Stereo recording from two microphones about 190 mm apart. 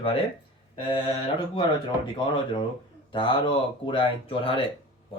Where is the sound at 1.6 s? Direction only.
25° left (ahead or behind).